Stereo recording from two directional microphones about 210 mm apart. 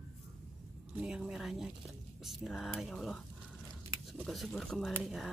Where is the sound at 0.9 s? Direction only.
5° right (ahead or behind).